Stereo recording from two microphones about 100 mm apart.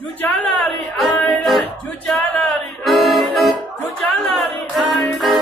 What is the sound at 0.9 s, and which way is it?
Music, centre (ahead or behind).